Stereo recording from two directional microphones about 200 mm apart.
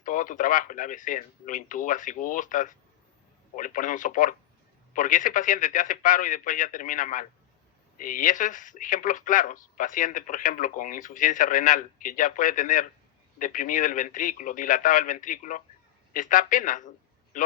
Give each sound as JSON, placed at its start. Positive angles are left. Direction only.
{"t": 0.0, "sound": "speech", "side_deg": 40}